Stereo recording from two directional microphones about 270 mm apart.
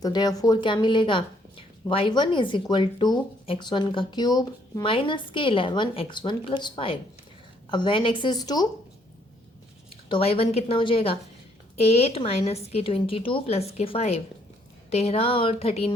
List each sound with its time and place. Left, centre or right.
0.0 s a woman's voice: centre
10.1 s a woman's voice: left